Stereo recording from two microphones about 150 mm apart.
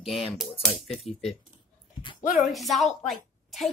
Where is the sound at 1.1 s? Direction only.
45° left (ahead or behind).